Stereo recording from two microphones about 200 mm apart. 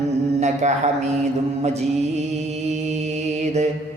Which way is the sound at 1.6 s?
35° right (ahead or behind).